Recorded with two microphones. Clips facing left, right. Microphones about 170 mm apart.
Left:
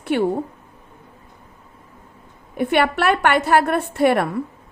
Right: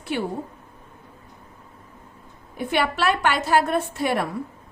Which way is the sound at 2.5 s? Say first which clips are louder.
Left 5 dB; 60° left (ahead or behind).